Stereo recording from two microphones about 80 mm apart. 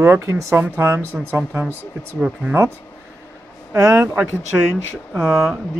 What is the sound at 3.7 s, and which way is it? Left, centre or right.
Speech, right.